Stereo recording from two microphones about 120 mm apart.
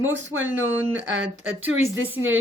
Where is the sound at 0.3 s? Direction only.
15° right (ahead or behind).